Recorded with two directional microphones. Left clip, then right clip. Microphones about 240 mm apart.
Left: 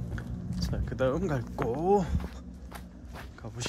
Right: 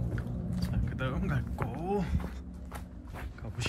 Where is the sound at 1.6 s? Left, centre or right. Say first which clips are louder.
Left 9 dB; centre.